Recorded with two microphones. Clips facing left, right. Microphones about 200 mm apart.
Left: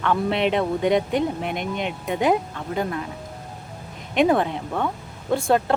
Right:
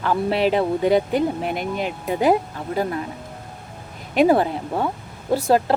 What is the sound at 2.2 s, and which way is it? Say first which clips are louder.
Speech: right 3 dB; 35° right (ahead or behind).